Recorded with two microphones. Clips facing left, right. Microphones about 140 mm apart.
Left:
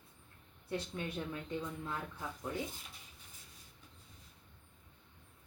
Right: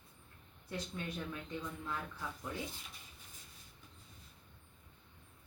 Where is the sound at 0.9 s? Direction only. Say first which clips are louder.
Left 2 dB; 20° left (ahead or behind).